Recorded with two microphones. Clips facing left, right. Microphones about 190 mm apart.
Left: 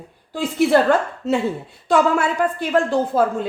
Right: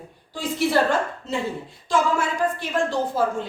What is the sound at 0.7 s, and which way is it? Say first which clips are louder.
Speech: left 5 dB; 65° left (ahead or behind).